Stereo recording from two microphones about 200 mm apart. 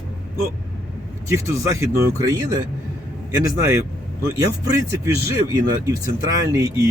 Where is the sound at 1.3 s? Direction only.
15° right (ahead or behind).